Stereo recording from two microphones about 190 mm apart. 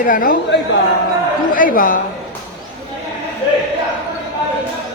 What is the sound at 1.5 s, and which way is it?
Speech, 45° left (ahead or behind).